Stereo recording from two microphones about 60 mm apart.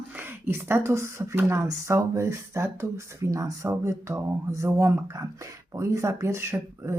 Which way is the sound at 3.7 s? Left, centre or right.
Right.